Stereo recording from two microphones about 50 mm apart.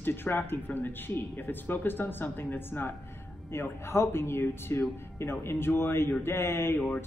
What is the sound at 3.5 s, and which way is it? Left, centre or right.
Speech, left.